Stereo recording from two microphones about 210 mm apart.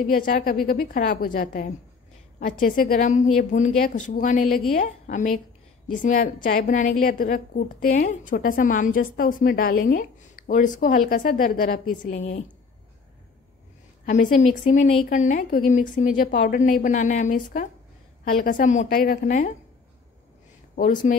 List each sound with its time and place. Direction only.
0.0 s a woman's voice: 45° left (ahead or behind)
12.1 s a woman's voice: 30° left (ahead or behind)
14.2 s a woman's voice: 30° left (ahead or behind)
21.1 s a woman's voice: 35° left (ahead or behind)